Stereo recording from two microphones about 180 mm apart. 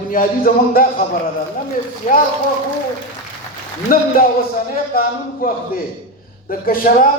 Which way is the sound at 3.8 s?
50° left (ahead or behind).